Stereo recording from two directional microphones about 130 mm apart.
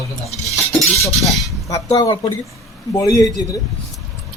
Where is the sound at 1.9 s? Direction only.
30° left (ahead or behind).